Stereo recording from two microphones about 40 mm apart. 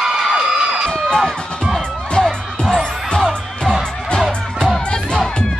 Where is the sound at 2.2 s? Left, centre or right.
Centre.